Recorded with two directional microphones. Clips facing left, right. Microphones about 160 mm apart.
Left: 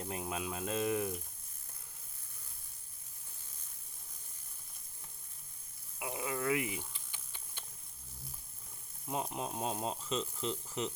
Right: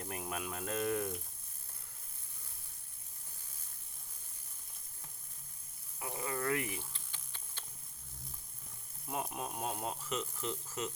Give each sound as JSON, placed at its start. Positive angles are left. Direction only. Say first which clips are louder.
{"t": 0.0, "sound": "speech", "louder": "left 2 dB", "side_deg": 20}
{"t": 6.0, "sound": "rattle", "louder": "left 1 dB", "side_deg": 10}
{"t": 9.0, "sound": "speech", "louder": "left 2 dB", "side_deg": 20}